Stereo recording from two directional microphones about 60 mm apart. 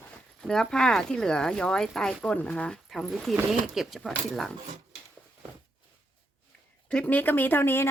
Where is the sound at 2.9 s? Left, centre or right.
Centre.